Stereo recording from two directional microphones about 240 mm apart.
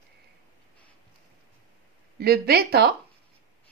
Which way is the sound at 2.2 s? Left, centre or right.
Right.